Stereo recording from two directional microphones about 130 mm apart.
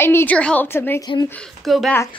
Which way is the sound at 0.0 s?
15° left (ahead or behind).